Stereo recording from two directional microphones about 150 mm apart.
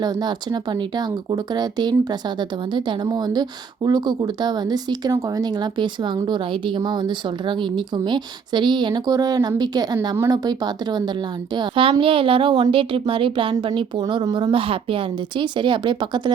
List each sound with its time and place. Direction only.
0.0 s a woman's voice: 30° right (ahead or behind)